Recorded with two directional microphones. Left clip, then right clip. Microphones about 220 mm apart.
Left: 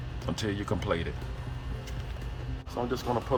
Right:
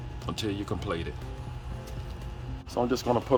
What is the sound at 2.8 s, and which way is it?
Speech, 55° right (ahead or behind).